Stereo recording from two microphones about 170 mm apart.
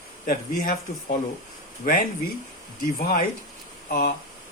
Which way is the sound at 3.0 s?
60° left (ahead or behind).